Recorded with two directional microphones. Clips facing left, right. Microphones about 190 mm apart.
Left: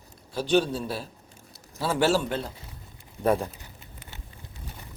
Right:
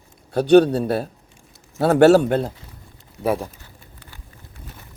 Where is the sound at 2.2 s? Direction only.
50° right (ahead or behind).